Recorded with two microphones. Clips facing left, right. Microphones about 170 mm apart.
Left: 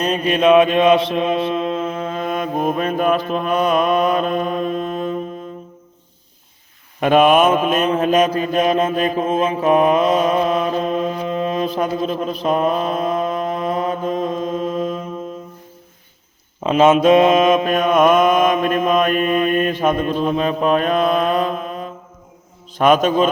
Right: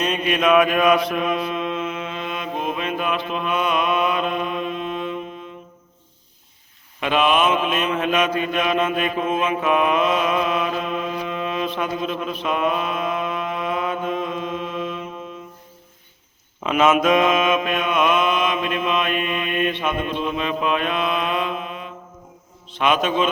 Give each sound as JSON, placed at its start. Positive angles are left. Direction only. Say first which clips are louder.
{"t": 0.0, "sound": "mantra", "louder": "left 4 dB", "side_deg": 35}
{"t": 7.0, "sound": "mantra", "louder": "left 6 dB", "side_deg": 45}
{"t": 16.6, "sound": "mantra", "louder": "left 5 dB", "side_deg": 30}
{"t": 22.7, "sound": "a man's voice", "louder": "left 6 dB", "side_deg": 40}